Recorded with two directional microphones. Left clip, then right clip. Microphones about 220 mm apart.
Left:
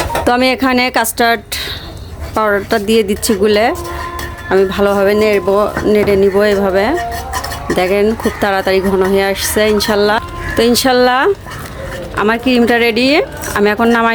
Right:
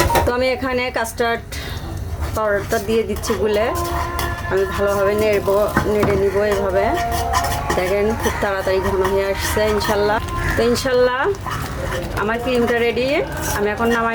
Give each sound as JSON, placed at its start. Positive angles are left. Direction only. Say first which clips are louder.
{"t": 0.3, "sound": "speech", "louder": "left 7 dB", "side_deg": 40}